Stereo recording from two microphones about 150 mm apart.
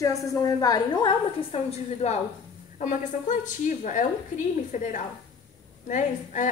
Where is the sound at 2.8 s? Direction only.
55° left (ahead or behind).